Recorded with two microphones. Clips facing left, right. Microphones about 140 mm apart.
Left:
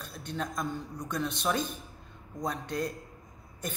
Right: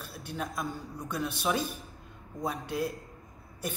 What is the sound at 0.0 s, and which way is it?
A man's voice, 10° right (ahead or behind).